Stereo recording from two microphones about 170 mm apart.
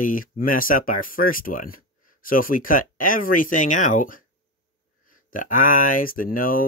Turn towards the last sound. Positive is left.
turn(degrees=55)  # may be behind; listen again after turning